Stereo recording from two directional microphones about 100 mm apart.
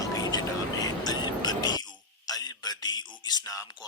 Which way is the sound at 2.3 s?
40° left (ahead or behind).